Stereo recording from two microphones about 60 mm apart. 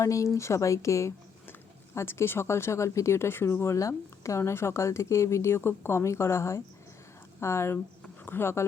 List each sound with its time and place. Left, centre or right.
0.0 s speech: left
2.0 s speech: left
3.8 s speech: left
8.2 s speech: left